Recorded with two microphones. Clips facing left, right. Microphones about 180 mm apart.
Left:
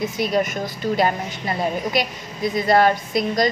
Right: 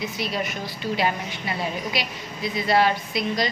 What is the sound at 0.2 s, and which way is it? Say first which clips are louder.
A woman's voice: left 9 dB; 45° left (ahead or behind).